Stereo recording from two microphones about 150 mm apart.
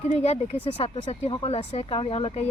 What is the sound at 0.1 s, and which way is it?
Speech, 45° left (ahead or behind).